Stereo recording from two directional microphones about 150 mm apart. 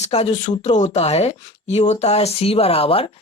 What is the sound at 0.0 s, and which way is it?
Speech, 45° left (ahead or behind).